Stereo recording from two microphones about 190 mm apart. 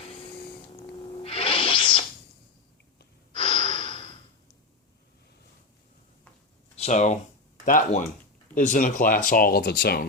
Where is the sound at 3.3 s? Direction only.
30° left (ahead or behind).